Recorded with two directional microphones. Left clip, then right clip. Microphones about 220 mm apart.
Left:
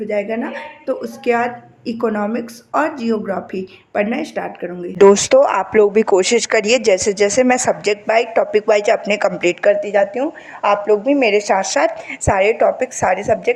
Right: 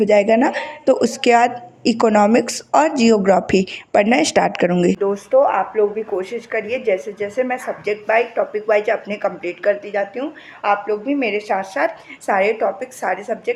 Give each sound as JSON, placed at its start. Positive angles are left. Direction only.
{"t": 0.0, "sound": "a woman's voice", "side_deg": -35}
{"t": 4.9, "sound": "speech", "side_deg": 45}